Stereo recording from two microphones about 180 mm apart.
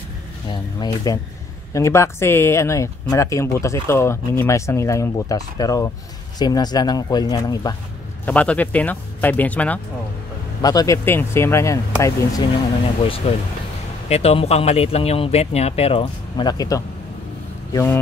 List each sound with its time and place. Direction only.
0.5 s speech: 25° left (ahead or behind)
8.3 s speech: 10° left (ahead or behind)
10.6 s speech: 20° left (ahead or behind)
13.2 s speech: 30° left (ahead or behind)